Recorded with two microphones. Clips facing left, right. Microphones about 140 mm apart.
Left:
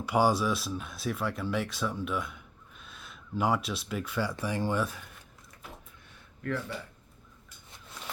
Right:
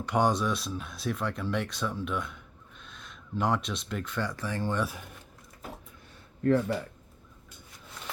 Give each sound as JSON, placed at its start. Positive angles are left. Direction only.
{"t": 0.0, "sound": "speech", "side_deg": 5}
{"t": 6.4, "sound": "speech", "side_deg": -40}